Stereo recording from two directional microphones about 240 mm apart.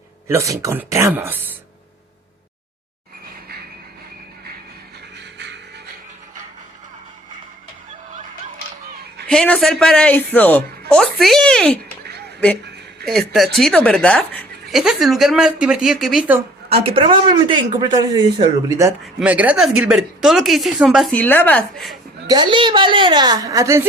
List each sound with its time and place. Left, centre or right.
0.3 s a woman's voice: centre
9.2 s speech: centre
13.1 s speech: centre
16.8 s speech: right; by 21.9 s centre
22.3 s a woman's voice: centre